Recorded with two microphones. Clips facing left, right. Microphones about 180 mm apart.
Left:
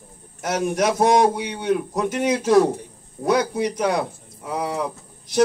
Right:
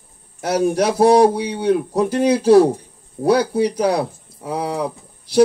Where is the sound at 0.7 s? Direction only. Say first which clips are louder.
Right 4 dB; 30° right (ahead or behind).